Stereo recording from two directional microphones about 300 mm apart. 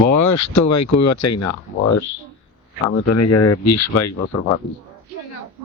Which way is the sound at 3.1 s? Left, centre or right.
Left.